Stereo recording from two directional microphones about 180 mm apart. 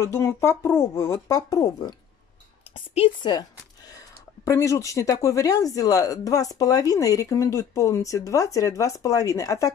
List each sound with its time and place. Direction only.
0.0 s speech: 15° left (ahead or behind)